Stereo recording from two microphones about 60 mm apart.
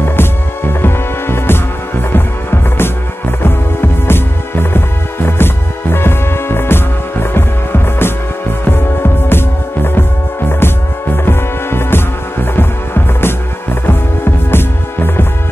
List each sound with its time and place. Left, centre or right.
0.0 s music: left
11.2 s music: left